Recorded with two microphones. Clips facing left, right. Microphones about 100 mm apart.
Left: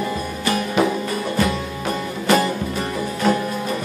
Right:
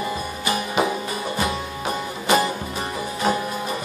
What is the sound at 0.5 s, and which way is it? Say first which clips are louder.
Music: left 3 dB; 10° right (ahead or behind).